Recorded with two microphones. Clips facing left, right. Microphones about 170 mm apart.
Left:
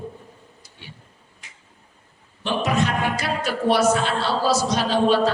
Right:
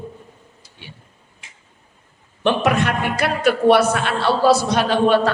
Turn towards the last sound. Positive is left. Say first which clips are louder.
# right 3 dB
turn(degrees=-60)  # may be behind; listen again after turning